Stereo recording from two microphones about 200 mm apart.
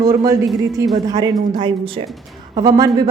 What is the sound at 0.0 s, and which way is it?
A woman's voice, 15° right (ahead or behind).